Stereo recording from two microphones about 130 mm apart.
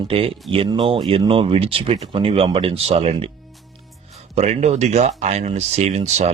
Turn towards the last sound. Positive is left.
turn(degrees=-60)  # may be behind; listen again after turning